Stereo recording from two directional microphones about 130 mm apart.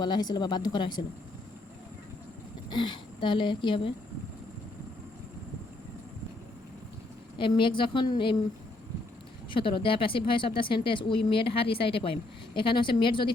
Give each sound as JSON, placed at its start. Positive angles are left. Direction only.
{"t": 0.0, "sound": "speech", "side_deg": 35}
{"t": 2.6, "sound": "speech", "side_deg": 35}
{"t": 7.3, "sound": "speech", "side_deg": 40}
{"t": 9.5, "sound": "speech", "side_deg": 40}